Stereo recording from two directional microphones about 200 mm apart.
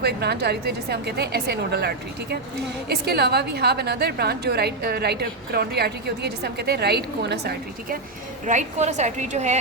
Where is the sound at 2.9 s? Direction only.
50° right (ahead or behind).